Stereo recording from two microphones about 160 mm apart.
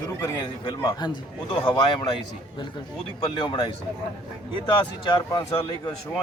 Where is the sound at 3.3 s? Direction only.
30° left (ahead or behind).